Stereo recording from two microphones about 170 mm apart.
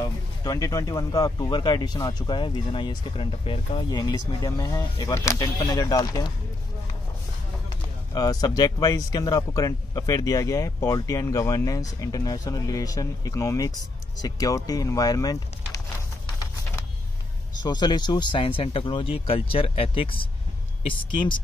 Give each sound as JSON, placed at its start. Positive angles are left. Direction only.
{"t": 0.4, "sound": "speech", "side_deg": 20}
{"t": 3.9, "sound": "speech", "side_deg": 20}
{"t": 8.1, "sound": "speech", "side_deg": 20}
{"t": 17.6, "sound": "speech", "side_deg": 25}